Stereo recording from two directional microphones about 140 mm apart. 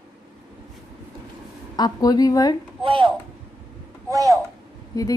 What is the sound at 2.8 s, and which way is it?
Speech, 35° right (ahead or behind).